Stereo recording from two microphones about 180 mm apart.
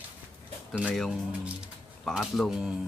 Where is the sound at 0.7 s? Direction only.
5° left (ahead or behind).